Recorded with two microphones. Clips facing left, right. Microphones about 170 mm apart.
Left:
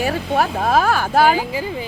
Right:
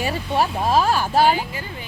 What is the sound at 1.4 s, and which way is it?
Speech, 90° left.